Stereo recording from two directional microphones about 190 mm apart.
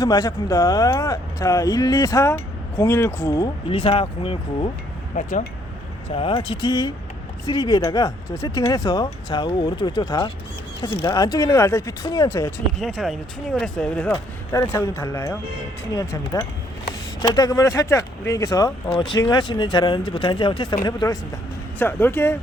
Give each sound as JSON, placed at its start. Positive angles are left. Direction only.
{"t": 0.0, "sound": "speech", "side_deg": 20}
{"t": 6.1, "sound": "speech", "side_deg": 30}
{"t": 12.8, "sound": "speech", "side_deg": 0}